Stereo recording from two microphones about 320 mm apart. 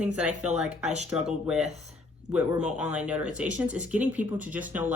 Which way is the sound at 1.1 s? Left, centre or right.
Centre.